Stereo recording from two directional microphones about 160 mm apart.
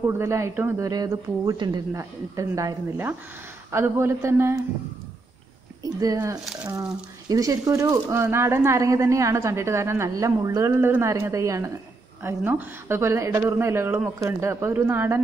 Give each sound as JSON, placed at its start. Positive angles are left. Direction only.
{"t": 0.0, "sound": "speech", "side_deg": -15}
{"t": 5.8, "sound": "speech", "side_deg": -20}
{"t": 6.4, "sound": "speech", "side_deg": -5}
{"t": 7.2, "sound": "speech", "side_deg": -20}